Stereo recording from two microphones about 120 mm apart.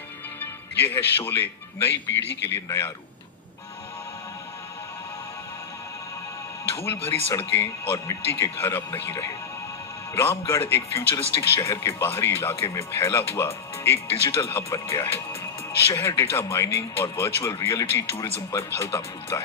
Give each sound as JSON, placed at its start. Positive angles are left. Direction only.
{"t": 0.9, "sound": "speech", "side_deg": 20}
{"t": 6.8, "sound": "speech", "side_deg": 20}